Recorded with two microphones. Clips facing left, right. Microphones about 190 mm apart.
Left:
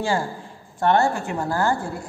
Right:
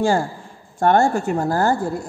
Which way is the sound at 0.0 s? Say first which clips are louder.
Right 5 dB; 45° right (ahead or behind).